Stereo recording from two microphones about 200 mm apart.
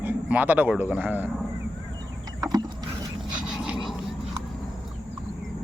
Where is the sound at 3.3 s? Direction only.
5° right (ahead or behind).